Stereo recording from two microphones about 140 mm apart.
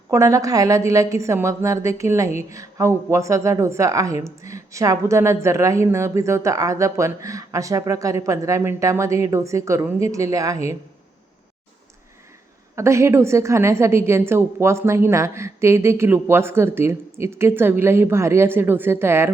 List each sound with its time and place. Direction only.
0.1 s a woman's voice: 20° right (ahead or behind)
12.7 s a woman's voice: 20° right (ahead or behind)